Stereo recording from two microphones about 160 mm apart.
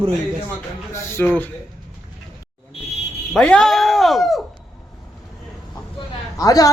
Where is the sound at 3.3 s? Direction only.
5° left (ahead or behind).